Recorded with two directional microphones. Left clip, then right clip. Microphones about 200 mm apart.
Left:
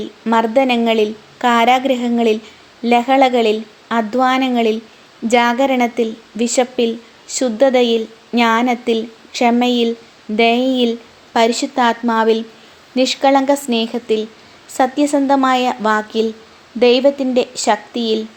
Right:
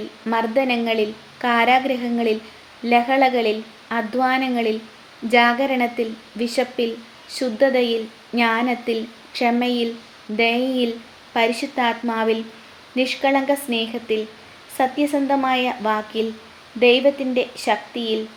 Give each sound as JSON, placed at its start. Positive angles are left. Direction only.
{"t": 0.3, "sound": "a woman's voice", "side_deg": 35}